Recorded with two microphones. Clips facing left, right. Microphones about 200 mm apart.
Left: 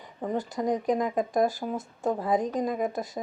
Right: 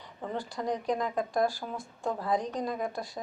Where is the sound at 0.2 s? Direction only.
20° left (ahead or behind).